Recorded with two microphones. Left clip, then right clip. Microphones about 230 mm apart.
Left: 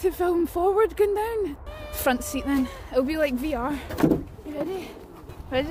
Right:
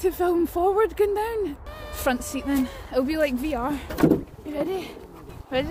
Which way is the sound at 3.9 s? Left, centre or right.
Right.